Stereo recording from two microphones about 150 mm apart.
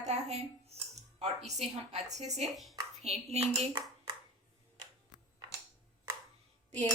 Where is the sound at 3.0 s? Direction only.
45° right (ahead or behind).